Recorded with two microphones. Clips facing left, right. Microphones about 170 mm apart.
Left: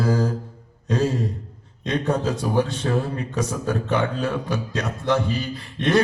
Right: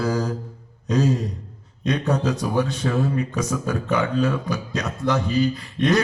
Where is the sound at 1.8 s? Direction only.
30° left (ahead or behind).